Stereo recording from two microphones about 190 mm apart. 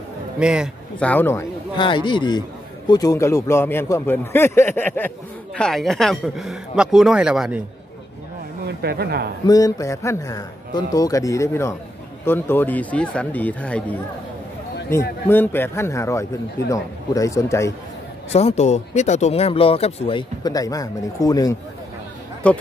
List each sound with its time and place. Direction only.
0.4 s speech: 5° right (ahead or behind)
0.9 s a man's voice: 10° left (ahead or behind)
1.8 s a man's voice: 25° left (ahead or behind); by 7.6 s 5° right (ahead or behind)
8.8 s a man's voice: 55° right (ahead or behind)
9.5 s a man's voice: 20° left (ahead or behind)
18.3 s speech: 35° left (ahead or behind); by 21.5 s 20° left (ahead or behind)
22.4 s a man's voice: 5° left (ahead or behind)